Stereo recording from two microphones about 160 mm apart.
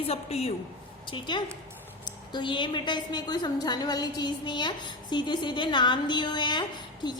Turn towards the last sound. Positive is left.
turn(degrees=30)  # may be behind; listen again after turning